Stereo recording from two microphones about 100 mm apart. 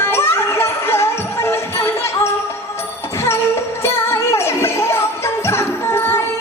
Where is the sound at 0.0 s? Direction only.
25° left (ahead or behind).